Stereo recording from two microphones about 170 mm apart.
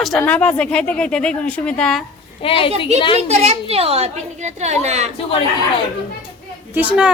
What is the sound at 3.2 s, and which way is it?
A woman's voice, 40° right (ahead or behind).